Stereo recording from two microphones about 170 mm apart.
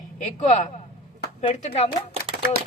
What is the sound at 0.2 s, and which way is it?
Speech, 45° left (ahead or behind).